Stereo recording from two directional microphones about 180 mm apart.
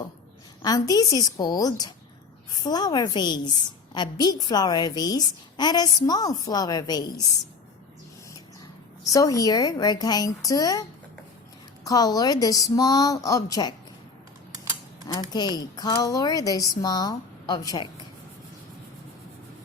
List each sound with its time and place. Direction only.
0.6 s a woman's voice: 20° left (ahead or behind)
9.1 s a woman's voice: 20° left (ahead or behind)
11.9 s a woman's voice: 20° left (ahead or behind)
15.0 s a woman's voice: 20° left (ahead or behind)